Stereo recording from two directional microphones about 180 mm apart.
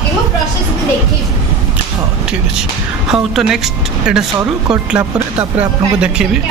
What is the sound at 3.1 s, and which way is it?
Speech, centre (ahead or behind).